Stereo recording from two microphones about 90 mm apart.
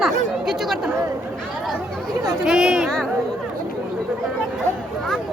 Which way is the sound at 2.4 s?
5° right (ahead or behind).